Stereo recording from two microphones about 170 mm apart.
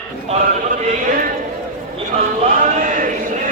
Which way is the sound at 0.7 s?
55° right (ahead or behind).